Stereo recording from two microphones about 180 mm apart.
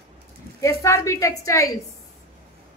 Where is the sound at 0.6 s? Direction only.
15° left (ahead or behind).